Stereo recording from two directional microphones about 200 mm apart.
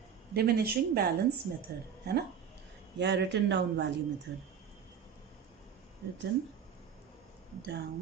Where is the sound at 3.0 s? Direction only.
60° right (ahead or behind).